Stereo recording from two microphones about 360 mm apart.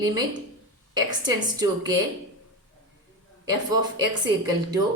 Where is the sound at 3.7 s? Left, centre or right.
Centre.